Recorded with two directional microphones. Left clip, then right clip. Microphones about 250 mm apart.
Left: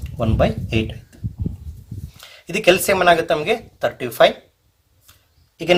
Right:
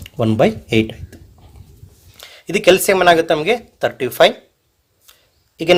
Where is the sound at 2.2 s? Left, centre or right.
Right.